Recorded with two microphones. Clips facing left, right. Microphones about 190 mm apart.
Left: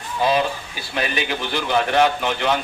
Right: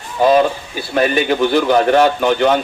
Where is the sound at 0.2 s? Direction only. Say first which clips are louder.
Right 8 dB; 45° right (ahead or behind).